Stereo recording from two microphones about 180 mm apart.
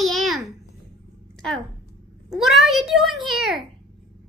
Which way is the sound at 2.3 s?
Centre (ahead or behind).